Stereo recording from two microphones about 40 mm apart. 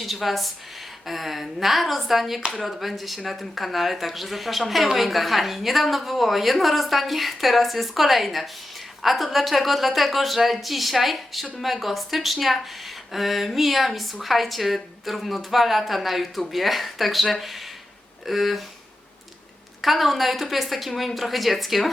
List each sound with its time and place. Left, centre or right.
0.0 s a woman's voice: centre
19.8 s a woman's voice: centre